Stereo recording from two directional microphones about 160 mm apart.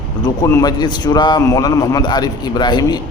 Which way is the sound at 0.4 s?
20° left (ahead or behind).